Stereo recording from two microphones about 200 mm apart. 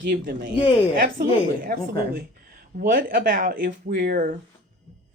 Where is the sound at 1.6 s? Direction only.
45° right (ahead or behind).